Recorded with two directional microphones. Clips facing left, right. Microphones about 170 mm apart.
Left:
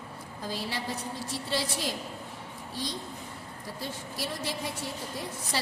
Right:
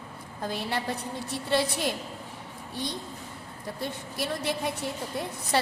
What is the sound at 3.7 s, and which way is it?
A woman's voice, 60° right (ahead or behind).